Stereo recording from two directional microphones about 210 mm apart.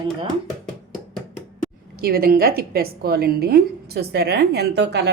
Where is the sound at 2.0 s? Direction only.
45° right (ahead or behind).